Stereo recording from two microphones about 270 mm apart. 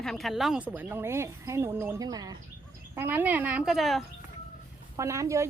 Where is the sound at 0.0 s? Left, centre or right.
Centre.